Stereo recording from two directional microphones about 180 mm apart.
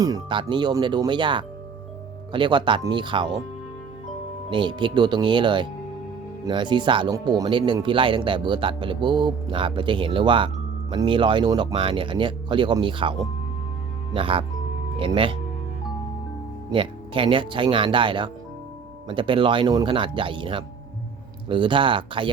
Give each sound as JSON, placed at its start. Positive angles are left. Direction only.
{"t": 0.0, "sound": "speech", "side_deg": -25}
{"t": 4.4, "sound": "speech", "side_deg": -25}
{"t": 14.2, "sound": "speech", "side_deg": -30}
{"t": 16.6, "sound": "speech", "side_deg": -30}